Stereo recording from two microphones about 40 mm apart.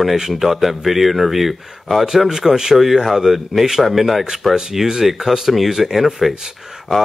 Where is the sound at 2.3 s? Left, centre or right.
Centre.